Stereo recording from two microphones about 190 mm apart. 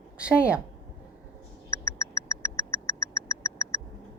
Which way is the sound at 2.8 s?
15° left (ahead or behind).